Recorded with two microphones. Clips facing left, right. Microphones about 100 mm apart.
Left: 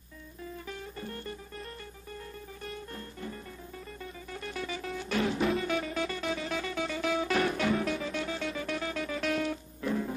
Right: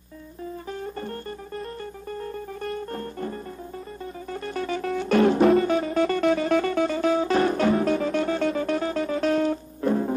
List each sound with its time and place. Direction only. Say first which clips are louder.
0.7 s music: right 10 dB; 45° right (ahead or behind)
5.5 s music: right 10 dB; 35° right (ahead or behind)